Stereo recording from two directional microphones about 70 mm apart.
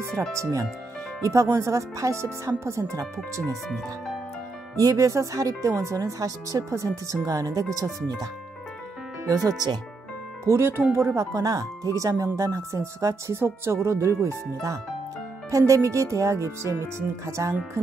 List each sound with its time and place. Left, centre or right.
0.3 s speech: right
3.7 s speech: centre
4.7 s speech: right
9.3 s speech: right
10.4 s speech: right
11.0 s speech: right